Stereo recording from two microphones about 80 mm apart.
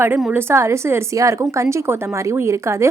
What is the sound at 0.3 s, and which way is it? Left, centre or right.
Speech, right.